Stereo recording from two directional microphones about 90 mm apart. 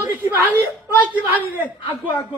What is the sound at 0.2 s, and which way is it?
A woman's voice, 25° right (ahead or behind).